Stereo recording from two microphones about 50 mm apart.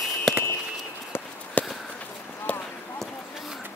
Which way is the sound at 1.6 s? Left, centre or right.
Left.